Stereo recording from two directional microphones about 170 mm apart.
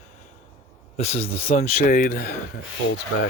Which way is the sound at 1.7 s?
55° left (ahead or behind).